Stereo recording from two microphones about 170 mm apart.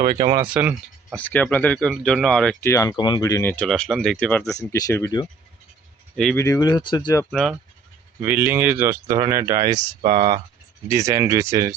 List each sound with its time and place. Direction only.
0.0 s speech: 25° right (ahead or behind)
0.5 s speech: 10° right (ahead or behind)
1.1 s speech: 10° left (ahead or behind)
2.6 s speech: 15° left (ahead or behind)
4.5 s speech: 20° left (ahead or behind)
6.3 s speech: 20° left (ahead or behind)
7.3 s speech: centre (ahead or behind)
8.2 s speech: 10° right (ahead or behind); by 10.4 s 30° right (ahead or behind)
10.8 s speech: 20° right (ahead or behind)